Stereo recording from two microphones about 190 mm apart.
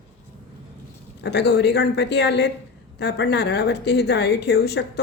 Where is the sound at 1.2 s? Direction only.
65° left (ahead or behind).